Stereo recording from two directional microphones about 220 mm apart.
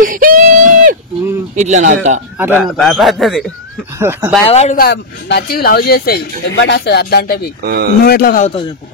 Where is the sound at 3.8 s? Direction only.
10° right (ahead or behind).